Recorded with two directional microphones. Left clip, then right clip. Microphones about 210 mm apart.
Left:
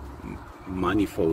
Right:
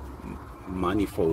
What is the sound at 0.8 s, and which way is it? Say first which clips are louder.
Speech: left 1 dB; 20° left (ahead or behind).